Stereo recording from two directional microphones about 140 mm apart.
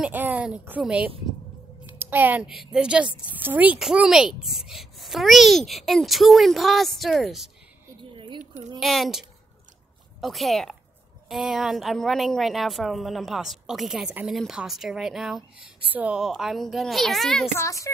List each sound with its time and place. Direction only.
0.0 s a woman's voice: 10° right (ahead or behind)
8.0 s a sound: 35° right (ahead or behind)
8.7 s a woman's voice: centre (ahead or behind)
10.2 s a woman's voice: centre (ahead or behind)
17.6 s speech: 20° left (ahead or behind)